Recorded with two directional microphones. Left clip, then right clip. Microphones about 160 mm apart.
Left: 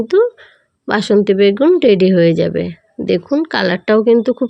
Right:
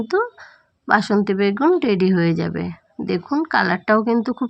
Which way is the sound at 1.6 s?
20° left (ahead or behind).